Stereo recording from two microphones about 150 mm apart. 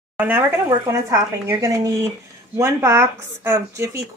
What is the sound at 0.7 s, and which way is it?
Speech, 20° right (ahead or behind).